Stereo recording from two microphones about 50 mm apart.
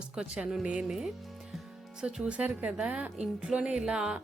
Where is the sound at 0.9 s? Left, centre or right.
Centre.